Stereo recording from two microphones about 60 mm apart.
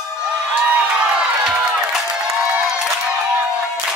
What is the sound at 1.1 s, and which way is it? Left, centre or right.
Crowd, centre.